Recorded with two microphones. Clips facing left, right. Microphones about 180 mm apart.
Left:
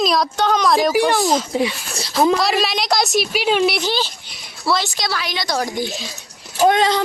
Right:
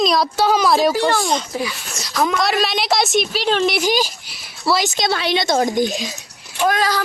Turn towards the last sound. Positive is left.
turn(degrees=25)  # may be behind; listen again after turning